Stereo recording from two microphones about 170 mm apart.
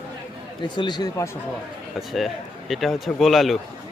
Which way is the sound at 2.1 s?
Centre (ahead or behind).